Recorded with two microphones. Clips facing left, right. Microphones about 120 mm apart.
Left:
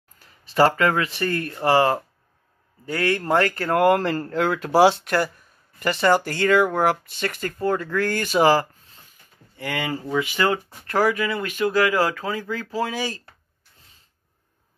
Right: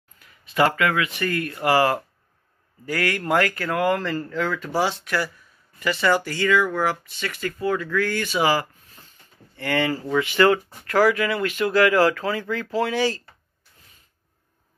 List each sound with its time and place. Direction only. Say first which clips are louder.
0.2 s speech: left 3 dB; 35° left (ahead or behind)
3.7 s speech: left 5 dB; 55° left (ahead or behind); by 5.1 s 70° left (ahead or behind)
5.9 s speech: left 3 dB; 45° left (ahead or behind)
9.6 s speech: right 4 dB; 15° left (ahead or behind)